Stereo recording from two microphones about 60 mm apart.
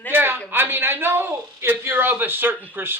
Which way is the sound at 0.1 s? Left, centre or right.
Right.